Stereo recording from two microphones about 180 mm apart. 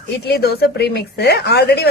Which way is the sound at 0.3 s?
60° left (ahead or behind).